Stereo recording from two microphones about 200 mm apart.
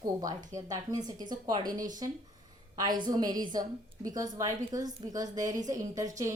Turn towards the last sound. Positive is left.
turn(degrees=-15)  # may be behind; listen again after turning